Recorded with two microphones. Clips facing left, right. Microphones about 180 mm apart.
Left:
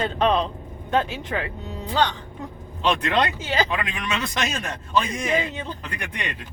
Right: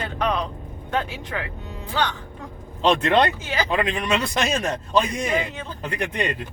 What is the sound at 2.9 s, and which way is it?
A man's voice, 25° right (ahead or behind).